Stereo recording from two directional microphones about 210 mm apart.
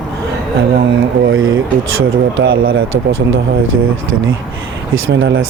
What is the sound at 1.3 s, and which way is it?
Speech, 70° right (ahead or behind).